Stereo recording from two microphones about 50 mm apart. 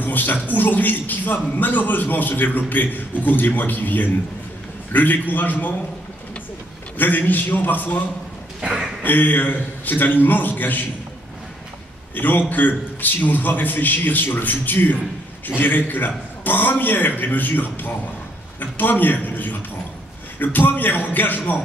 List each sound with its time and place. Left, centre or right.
0.0 s a man's voice: left
7.0 s a man's voice: left
8.5 s speech: centre
9.0 s a man's voice: left
12.2 s a man's voice: left